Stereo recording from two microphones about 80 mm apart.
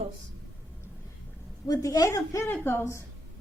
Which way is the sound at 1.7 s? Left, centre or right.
Left.